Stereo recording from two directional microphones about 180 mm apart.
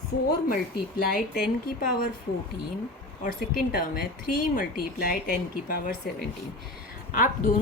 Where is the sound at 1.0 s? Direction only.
60° left (ahead or behind).